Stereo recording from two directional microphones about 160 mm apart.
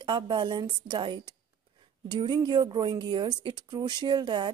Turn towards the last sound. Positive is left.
turn(degrees=-30)  # may be behind; listen again after turning